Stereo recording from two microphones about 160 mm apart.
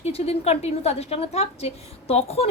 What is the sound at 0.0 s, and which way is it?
A woman's voice, 40° left (ahead or behind).